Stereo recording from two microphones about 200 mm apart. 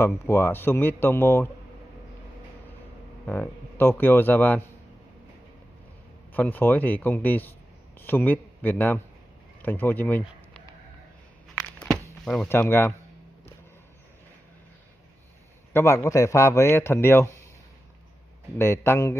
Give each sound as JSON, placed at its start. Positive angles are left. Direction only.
{"t": 0.0, "sound": "a man's voice", "side_deg": 10}
{"t": 3.3, "sound": "a man's voice", "side_deg": 10}
{"t": 6.3, "sound": "a man's voice", "side_deg": 10}
{"t": 11.8, "sound": "door", "side_deg": 5}
{"t": 15.7, "sound": "a man's voice", "side_deg": 15}
{"t": 18.6, "sound": "a man's voice", "side_deg": 10}